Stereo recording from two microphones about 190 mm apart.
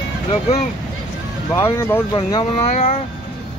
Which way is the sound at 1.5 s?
15° left (ahead or behind).